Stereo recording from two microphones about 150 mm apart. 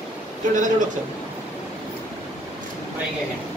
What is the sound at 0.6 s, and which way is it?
Speech, 60° right (ahead or behind).